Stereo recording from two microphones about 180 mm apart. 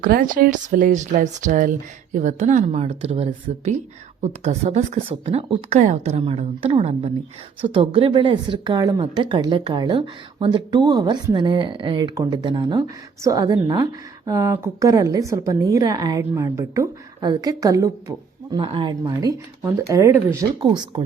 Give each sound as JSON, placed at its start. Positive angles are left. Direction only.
{"t": 0.0, "sound": "a woman's voice", "side_deg": -50}
{"t": 20.6, "sound": "a woman's voice", "side_deg": -30}